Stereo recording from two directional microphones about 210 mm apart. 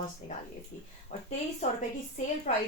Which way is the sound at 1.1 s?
35° left (ahead or behind).